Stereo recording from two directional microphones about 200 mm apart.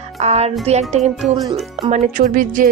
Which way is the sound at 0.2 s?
30° right (ahead or behind).